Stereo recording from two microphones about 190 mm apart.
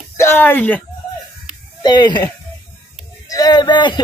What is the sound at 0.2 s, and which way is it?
Speech, 10° left (ahead or behind).